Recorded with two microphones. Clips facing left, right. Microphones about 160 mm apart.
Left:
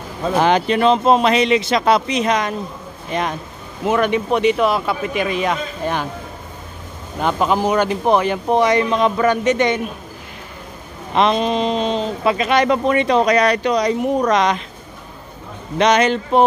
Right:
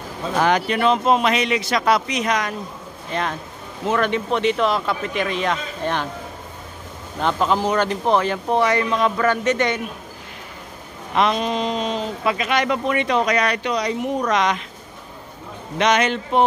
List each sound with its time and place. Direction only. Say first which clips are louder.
0.4 s speech: left 3 dB; 25° left (ahead or behind)
3.1 s speech: left 3 dB; 15° left (ahead or behind)
7.2 s speech: left 2 dB; 10° left (ahead or behind)
11.1 s speech: left 3 dB; 25° left (ahead or behind)
15.8 s speech: left 4 dB; 35° left (ahead or behind)